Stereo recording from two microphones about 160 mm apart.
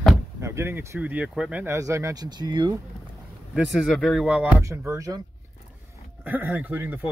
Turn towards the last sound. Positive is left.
turn(degrees=-10)  # may be behind; listen again after turning